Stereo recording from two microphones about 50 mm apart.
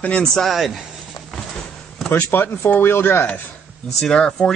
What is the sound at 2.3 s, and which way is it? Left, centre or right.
Speech, left.